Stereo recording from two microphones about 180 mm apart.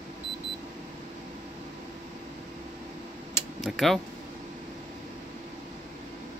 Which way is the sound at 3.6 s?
Centre (ahead or behind).